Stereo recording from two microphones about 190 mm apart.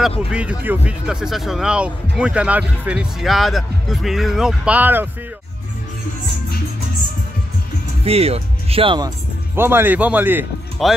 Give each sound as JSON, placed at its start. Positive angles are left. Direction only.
{"t": 0.3, "sound": "speech", "side_deg": -5}
{"t": 8.0, "sound": "speech", "side_deg": -30}
{"t": 9.6, "sound": "speech", "side_deg": -10}